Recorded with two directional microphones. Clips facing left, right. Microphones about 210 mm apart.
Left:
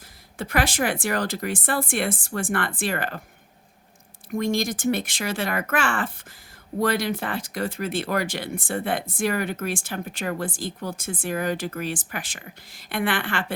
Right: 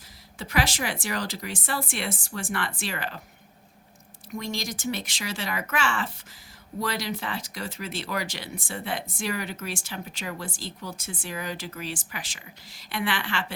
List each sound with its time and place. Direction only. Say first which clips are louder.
0.3 s speech: left 4 dB; 55° left (ahead or behind)
4.3 s speech: left 8 dB; 55° left (ahead or behind)